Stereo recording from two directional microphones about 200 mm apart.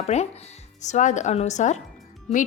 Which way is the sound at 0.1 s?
35° left (ahead or behind).